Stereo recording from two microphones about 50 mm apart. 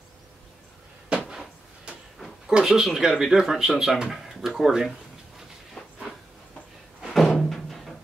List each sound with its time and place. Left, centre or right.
1.0 s cupboard open or close: centre
2.6 s speech: centre
5.8 s train: left
7.1 s music: centre